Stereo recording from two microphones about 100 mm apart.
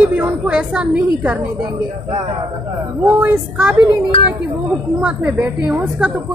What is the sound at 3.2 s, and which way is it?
Speech, 20° right (ahead or behind).